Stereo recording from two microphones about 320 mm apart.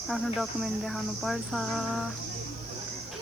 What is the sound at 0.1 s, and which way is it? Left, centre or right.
Cricket, centre.